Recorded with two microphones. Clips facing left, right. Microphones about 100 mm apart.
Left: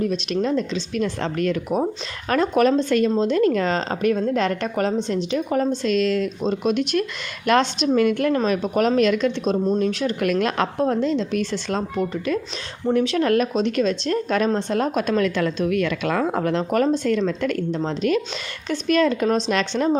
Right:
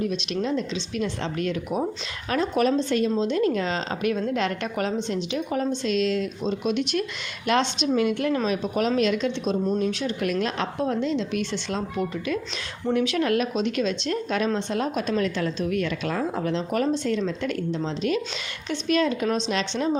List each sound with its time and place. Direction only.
0.4 s speech: 45° left (ahead or behind)
2.3 s speech: 55° left (ahead or behind)